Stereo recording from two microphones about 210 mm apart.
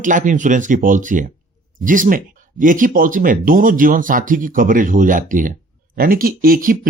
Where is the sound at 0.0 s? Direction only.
40° right (ahead or behind).